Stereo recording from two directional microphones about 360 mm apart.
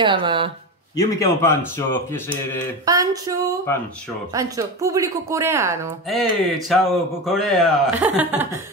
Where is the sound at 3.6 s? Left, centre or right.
Centre.